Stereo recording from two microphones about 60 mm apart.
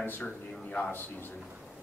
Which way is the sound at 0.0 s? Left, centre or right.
Left.